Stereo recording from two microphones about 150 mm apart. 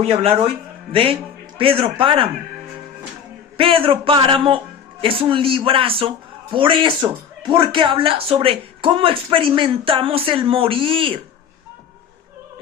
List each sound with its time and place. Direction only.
0.0 s a man's voice: 40° right (ahead or behind)
1.5 s a man's voice: 35° right (ahead or behind)
3.6 s a man's voice: 35° right (ahead or behind)